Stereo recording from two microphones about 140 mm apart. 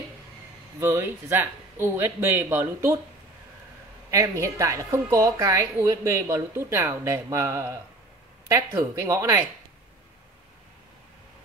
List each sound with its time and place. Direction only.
0.7 s speech: 15° right (ahead or behind)
4.1 s a woman's voice: 20° right (ahead or behind)
8.7 s a woman's voice: 20° right (ahead or behind)